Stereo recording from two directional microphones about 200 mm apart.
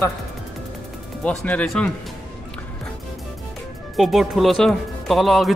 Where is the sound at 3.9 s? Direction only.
Centre (ahead or behind).